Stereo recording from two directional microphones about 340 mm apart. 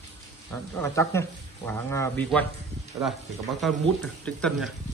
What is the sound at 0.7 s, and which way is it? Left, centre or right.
Speech, centre.